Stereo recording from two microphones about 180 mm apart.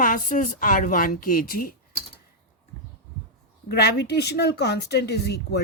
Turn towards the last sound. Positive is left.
turn(degrees=65)  # may be behind; listen again after turning